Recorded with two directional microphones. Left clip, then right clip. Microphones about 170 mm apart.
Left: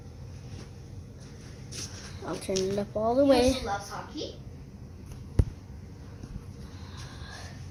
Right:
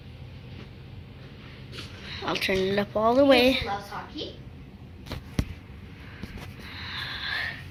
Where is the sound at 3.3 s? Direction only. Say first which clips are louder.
Right 3 dB; centre (ahead or behind).